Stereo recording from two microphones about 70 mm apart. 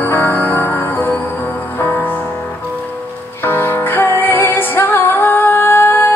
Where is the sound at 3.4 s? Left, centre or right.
Left.